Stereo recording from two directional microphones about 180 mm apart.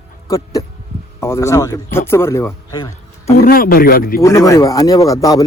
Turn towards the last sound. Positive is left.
turn(degrees=20)  # may be behind; listen again after turning